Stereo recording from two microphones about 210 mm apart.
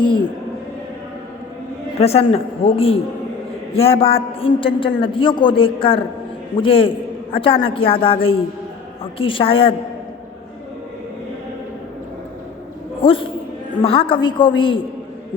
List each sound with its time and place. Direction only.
0.0 s speech: 20° left (ahead or behind)
2.0 s a man's voice: 30° left (ahead or behind)
13.0 s a man's voice: 25° left (ahead or behind)